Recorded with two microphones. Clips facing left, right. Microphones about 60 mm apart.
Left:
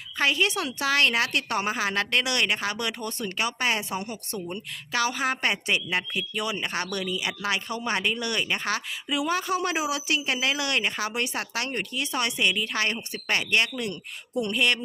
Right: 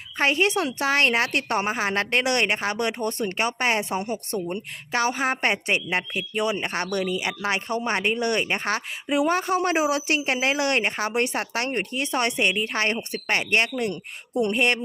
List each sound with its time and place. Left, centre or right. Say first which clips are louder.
0.2 s a woman's voice: right 3 dB; right